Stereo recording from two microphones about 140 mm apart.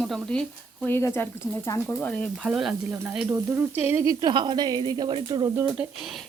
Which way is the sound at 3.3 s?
15° right (ahead or behind).